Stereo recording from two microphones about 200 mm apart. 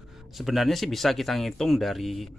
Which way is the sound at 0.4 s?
Centre (ahead or behind).